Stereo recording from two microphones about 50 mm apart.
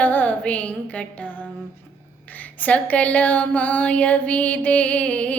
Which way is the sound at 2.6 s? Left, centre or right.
Left.